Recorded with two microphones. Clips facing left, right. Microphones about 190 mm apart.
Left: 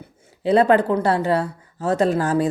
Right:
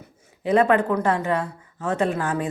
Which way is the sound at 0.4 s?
35° left (ahead or behind).